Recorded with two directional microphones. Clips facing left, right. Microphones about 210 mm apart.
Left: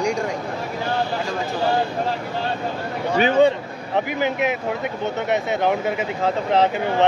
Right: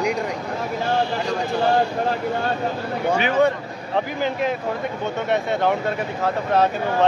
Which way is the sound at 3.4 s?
15° left (ahead or behind).